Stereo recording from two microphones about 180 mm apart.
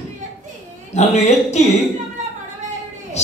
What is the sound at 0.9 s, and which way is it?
Speech, 40° left (ahead or behind).